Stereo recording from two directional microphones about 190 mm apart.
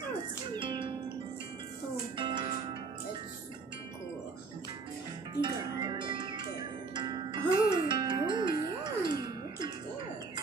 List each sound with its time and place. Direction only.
0.5 s music: 25° right (ahead or behind)
2.1 s music: 25° right (ahead or behind)
5.4 s music: 25° right (ahead or behind)